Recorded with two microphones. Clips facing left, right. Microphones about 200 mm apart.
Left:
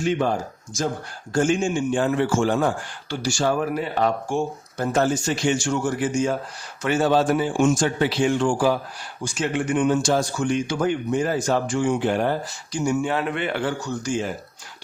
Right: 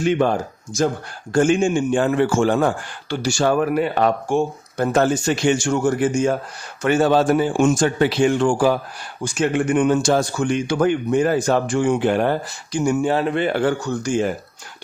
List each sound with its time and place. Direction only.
0.0 s a man's voice: 65° right (ahead or behind)
13.0 s a man's voice: 35° right (ahead or behind); by 14.3 s 55° right (ahead or behind)